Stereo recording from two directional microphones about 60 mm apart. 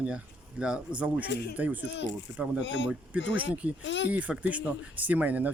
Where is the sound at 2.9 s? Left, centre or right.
Right.